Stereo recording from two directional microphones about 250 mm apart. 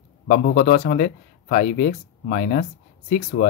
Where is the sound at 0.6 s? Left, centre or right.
Left.